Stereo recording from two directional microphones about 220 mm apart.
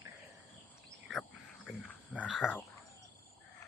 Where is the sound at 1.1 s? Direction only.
Centre (ahead or behind).